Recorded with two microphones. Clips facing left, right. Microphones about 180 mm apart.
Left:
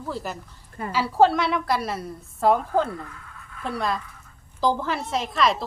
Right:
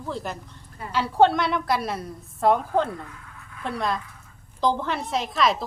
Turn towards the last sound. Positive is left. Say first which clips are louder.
# even
turn(degrees=0)  # may be behind; listen again after turning